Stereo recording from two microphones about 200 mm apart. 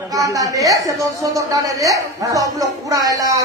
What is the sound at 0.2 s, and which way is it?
Speech, 15° right (ahead or behind).